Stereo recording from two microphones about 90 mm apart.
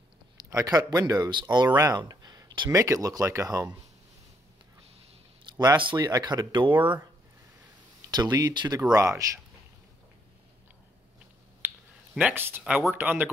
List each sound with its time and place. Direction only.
0.5 s speech: 40° right (ahead or behind)
2.0 s a sound: 45° right (ahead or behind)
2.7 s speech: 40° right (ahead or behind)
5.4 s a sound: 50° right (ahead or behind)
5.8 s speech: 65° right (ahead or behind)
6.0 s speech: 50° right (ahead or behind); by 6.9 s 65° right (ahead or behind)
8.0 s speech: 50° right (ahead or behind)
8.9 s speech: 35° right (ahead or behind)
11.6 s finger snapping: 25° right (ahead or behind)
12.4 s speech: 25° right (ahead or behind)